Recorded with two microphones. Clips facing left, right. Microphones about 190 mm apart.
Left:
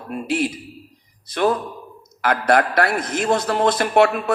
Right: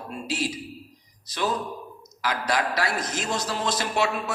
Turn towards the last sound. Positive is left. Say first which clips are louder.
# left 9 dB
turn(degrees=55)  # may be behind; listen again after turning